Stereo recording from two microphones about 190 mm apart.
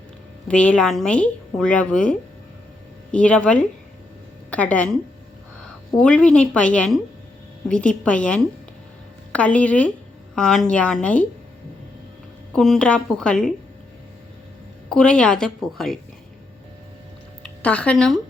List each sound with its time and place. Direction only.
0.4 s a woman's voice: 5° left (ahead or behind)
6.0 s a woman's voice: 5° left (ahead or behind)
12.5 s a woman's voice: centre (ahead or behind)
14.8 s a woman's voice: 5° left (ahead or behind)
17.4 s speech: 5° left (ahead or behind)